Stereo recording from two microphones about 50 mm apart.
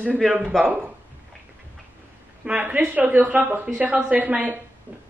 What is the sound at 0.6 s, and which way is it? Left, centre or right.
Speech, right.